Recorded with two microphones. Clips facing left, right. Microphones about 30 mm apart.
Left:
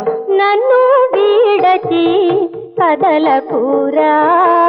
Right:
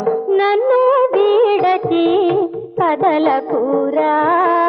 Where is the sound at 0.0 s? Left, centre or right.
Centre.